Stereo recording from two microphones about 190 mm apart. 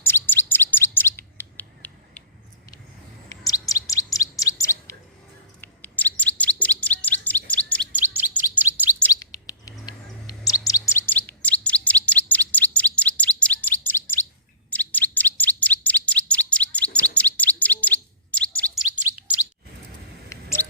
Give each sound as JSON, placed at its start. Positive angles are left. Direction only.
{"t": 0.0, "sound": "bird", "side_deg": 10}
{"t": 3.7, "sound": "chirp", "side_deg": 15}
{"t": 7.9, "sound": "chirp", "side_deg": -10}
{"t": 9.1, "sound": "bird", "side_deg": 15}
{"t": 10.2, "sound": "chirp", "side_deg": 20}
{"t": 14.7, "sound": "bird", "side_deg": 10}
{"t": 18.8, "sound": "bird", "side_deg": -5}
{"t": 20.3, "sound": "mouse", "side_deg": 15}